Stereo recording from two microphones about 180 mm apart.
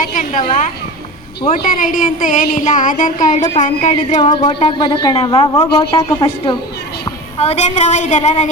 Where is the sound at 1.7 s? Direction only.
50° left (ahead or behind).